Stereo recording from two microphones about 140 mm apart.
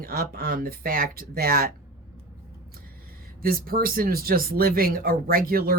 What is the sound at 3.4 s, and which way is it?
Speech, 90° right.